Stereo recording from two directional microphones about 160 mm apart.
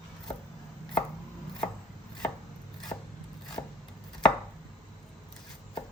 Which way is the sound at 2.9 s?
30° left (ahead or behind).